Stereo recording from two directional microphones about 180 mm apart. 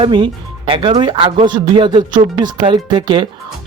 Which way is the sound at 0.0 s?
30° right (ahead or behind).